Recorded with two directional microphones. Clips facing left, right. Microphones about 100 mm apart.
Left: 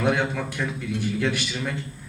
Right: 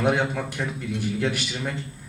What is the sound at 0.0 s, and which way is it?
Speech, 15° right (ahead or behind).